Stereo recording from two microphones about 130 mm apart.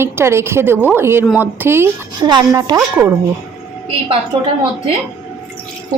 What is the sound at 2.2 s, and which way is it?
Speech, 35° right (ahead or behind).